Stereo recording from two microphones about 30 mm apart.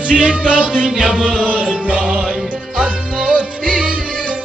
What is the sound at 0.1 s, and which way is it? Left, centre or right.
Music, right.